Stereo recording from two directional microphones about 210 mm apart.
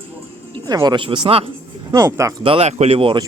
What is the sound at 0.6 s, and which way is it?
Speech, 20° right (ahead or behind).